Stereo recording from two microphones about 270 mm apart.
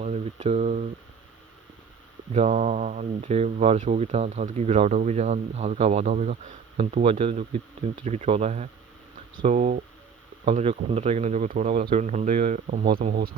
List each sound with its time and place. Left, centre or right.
0.0 s speech: right
2.3 s speech: right